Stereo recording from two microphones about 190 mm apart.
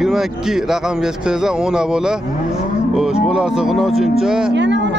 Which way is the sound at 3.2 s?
5° right (ahead or behind).